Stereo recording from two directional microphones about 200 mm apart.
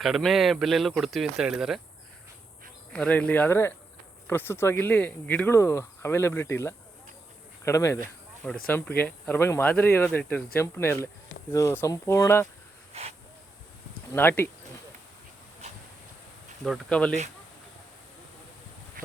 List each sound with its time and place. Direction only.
0.0 s speech: centre (ahead or behind)
2.9 s speech: 5° left (ahead or behind)
12.9 s speech: 30° right (ahead or behind)
14.1 s speech: 10° left (ahead or behind)
16.6 s speech: centre (ahead or behind)
19.0 s a sound: 45° right (ahead or behind)